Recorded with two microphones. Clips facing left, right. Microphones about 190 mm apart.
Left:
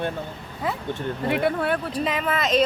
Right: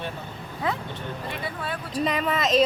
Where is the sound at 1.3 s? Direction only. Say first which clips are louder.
Left 13 dB; 60° left (ahead or behind).